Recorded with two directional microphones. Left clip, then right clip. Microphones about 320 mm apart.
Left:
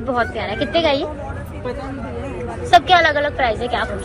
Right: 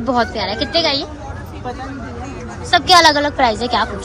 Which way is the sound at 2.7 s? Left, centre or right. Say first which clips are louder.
Right 2 dB; centre.